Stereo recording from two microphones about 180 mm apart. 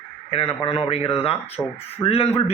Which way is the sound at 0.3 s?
30° left (ahead or behind).